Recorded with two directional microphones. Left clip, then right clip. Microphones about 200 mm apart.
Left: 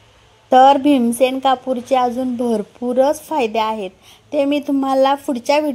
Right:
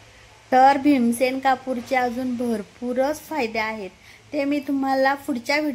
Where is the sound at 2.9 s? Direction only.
30° left (ahead or behind).